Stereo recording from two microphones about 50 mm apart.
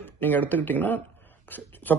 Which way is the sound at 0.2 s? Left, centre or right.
Left.